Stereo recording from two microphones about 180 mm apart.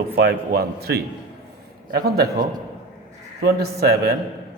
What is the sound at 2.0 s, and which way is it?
Speech, 60° right (ahead or behind).